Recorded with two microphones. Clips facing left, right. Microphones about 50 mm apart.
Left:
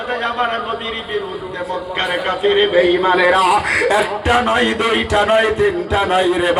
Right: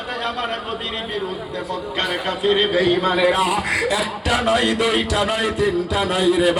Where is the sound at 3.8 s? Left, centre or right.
Left.